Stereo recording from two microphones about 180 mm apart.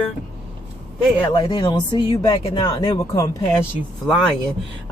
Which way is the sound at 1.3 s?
25° left (ahead or behind).